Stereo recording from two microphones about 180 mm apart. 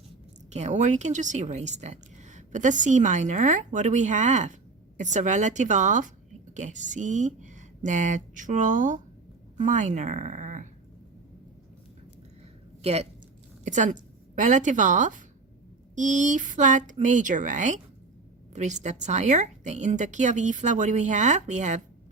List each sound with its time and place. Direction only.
0.5 s a woman's voice: 40° right (ahead or behind)
12.8 s a woman's voice: 35° right (ahead or behind)